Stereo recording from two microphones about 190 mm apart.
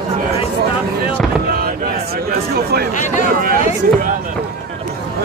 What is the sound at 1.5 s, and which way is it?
Speech, 55° right (ahead or behind).